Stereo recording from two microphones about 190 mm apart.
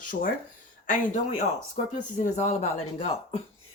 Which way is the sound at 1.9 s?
40° left (ahead or behind).